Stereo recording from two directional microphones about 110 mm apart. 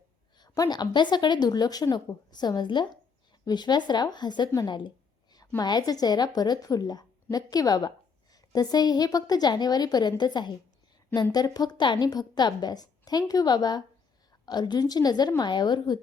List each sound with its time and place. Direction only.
0.3 s speech: 35° left (ahead or behind)